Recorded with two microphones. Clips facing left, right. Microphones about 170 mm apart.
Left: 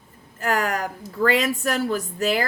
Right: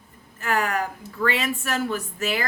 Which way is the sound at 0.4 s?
40° left (ahead or behind).